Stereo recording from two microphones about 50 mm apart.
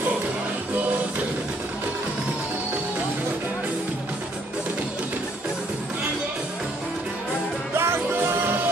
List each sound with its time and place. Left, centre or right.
7.7 s music: right